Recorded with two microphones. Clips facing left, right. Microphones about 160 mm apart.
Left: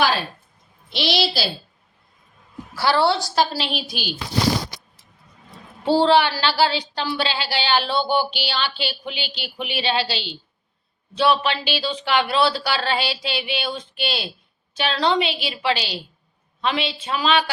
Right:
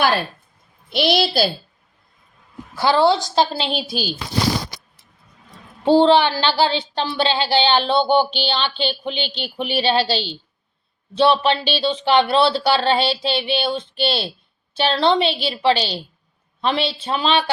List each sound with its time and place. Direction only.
0.9 s a child's voice: 50° right (ahead or behind)
2.7 s speech: 20° right (ahead or behind)
5.8 s speech: 20° right (ahead or behind)
8.2 s speech: 5° left (ahead or behind)
8.4 s speech: 25° right (ahead or behind)
8.7 s a woman's voice: 5° left (ahead or behind)
9.6 s a woman's voice: 35° right (ahead or behind)
10.0 s a woman's voice: centre (ahead or behind)
11.1 s a woman's voice: 30° right (ahead or behind)